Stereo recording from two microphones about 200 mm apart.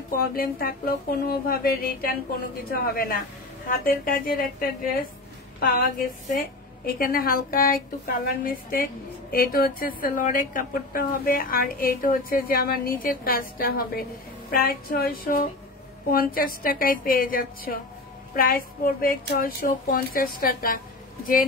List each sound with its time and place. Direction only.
0.1 s a woman's voice: 45° left (ahead or behind)